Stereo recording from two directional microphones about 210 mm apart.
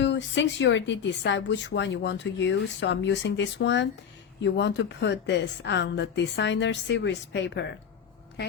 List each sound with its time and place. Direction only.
0.0 s speech: 60° left (ahead or behind)